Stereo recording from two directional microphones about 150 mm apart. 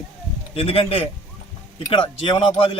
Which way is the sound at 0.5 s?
40° left (ahead or behind).